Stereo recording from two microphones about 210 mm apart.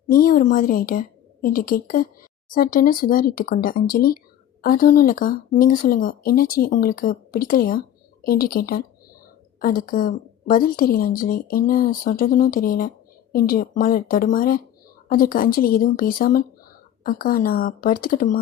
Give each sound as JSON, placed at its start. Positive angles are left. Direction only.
{"t": 0.1, "sound": "a woman's voice", "side_deg": 40}